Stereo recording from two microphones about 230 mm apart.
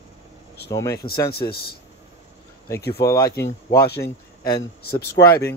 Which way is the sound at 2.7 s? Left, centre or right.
Centre.